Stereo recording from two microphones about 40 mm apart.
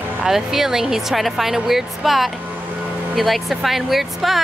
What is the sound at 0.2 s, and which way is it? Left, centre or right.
Speech, centre.